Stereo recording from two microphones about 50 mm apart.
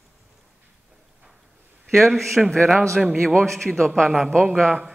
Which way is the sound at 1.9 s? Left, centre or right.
Centre.